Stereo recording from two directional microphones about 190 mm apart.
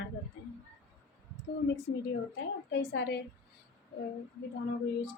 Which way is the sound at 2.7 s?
55° left (ahead or behind).